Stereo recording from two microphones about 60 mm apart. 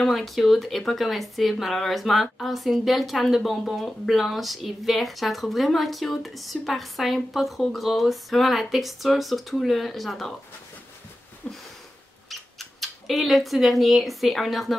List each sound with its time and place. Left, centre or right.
0.1 s speech: centre
11.4 s sniff: centre
12.3 s speech: centre